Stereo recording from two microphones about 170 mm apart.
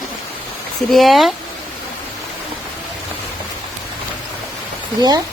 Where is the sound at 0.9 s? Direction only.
Centre (ahead or behind).